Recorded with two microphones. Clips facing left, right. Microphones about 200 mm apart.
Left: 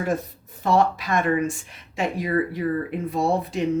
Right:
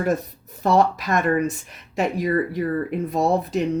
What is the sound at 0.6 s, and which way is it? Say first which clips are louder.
Speech: right 2 dB; 40° right (ahead or behind).